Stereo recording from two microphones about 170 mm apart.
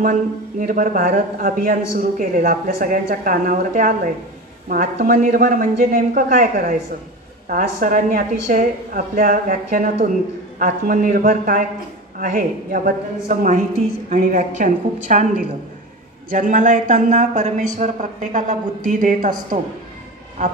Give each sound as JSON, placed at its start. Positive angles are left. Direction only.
{"t": 0.0, "sound": "a man's voice", "side_deg": -50}